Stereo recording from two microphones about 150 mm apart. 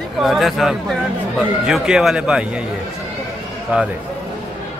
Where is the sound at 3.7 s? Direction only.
10° right (ahead or behind).